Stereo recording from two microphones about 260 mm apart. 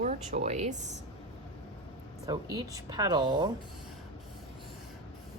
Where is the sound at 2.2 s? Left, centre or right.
Centre.